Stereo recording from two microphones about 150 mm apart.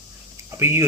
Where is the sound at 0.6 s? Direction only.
15° right (ahead or behind).